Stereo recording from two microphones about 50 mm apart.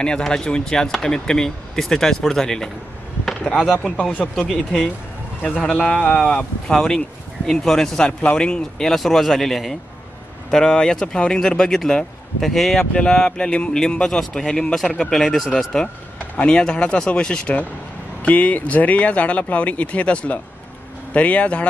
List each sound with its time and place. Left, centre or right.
0.0 s speech: centre
3.8 s speech: centre
4.1 s speech: left
5.7 s speech: centre
12.9 s speech: centre
15.5 s speech: centre
18.2 s speech: left